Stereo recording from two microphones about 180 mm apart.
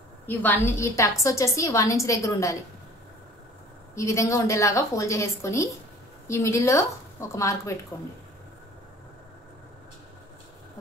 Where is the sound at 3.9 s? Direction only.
15° left (ahead or behind).